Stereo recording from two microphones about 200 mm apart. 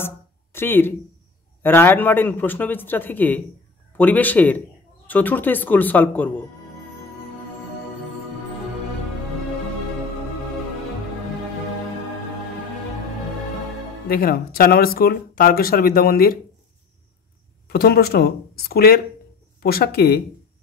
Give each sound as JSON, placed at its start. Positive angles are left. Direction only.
{"t": 0.0, "sound": "a sound", "side_deg": 10}
{"t": 1.6, "sound": "a man's voice", "side_deg": 10}
{"t": 14.0, "sound": "speech", "side_deg": 45}
{"t": 17.6, "sound": "speech", "side_deg": 50}